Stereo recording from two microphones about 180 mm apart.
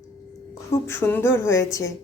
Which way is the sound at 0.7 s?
15° left (ahead or behind).